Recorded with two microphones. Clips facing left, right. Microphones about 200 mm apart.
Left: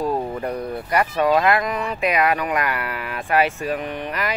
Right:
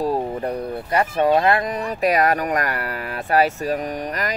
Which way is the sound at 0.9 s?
30° right (ahead or behind).